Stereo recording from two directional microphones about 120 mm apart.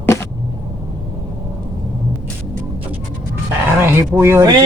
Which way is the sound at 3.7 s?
20° right (ahead or behind).